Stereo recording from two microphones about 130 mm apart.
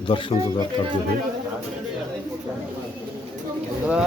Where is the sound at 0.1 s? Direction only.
40° left (ahead or behind).